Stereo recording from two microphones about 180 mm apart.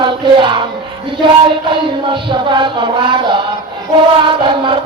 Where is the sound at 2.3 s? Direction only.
25° right (ahead or behind).